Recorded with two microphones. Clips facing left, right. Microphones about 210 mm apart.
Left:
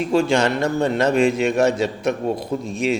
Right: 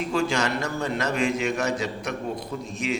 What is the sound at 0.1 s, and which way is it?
A man's voice, 25° left (ahead or behind).